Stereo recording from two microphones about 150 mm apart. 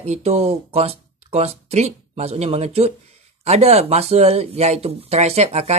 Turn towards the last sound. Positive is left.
turn(degrees=-45)  # may be behind; listen again after turning